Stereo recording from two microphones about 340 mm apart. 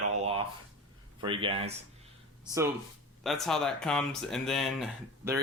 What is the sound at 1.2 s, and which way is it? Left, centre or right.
Speech, centre.